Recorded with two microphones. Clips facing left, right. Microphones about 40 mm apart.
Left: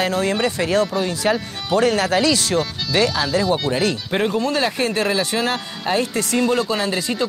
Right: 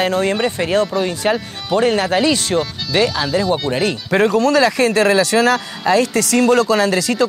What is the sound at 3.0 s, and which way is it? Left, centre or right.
Speech, centre.